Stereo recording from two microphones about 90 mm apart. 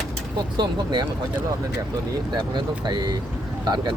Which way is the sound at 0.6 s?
60° right (ahead or behind).